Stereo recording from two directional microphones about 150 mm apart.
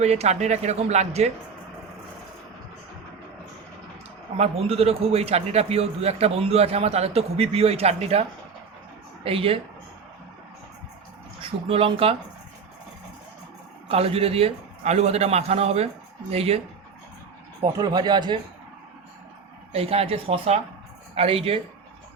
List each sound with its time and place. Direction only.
0.0 s a man's voice: 45° right (ahead or behind)
4.4 s a man's voice: 40° right (ahead or behind)
11.7 s speech: 40° right (ahead or behind)
13.8 s a man's voice: 40° right (ahead or behind)
17.6 s speech: 30° right (ahead or behind)
19.7 s speech: 40° right (ahead or behind)